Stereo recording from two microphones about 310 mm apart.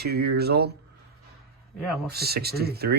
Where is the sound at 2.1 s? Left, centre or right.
Right.